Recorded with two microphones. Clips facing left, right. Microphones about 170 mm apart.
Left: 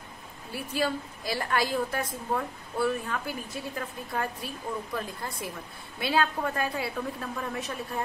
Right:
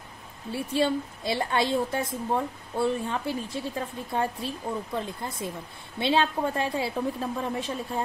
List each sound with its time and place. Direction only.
0.5 s a woman's voice: 25° right (ahead or behind)